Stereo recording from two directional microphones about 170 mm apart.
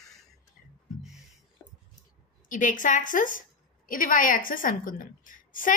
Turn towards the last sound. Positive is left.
turn(degrees=50)  # may be behind; listen again after turning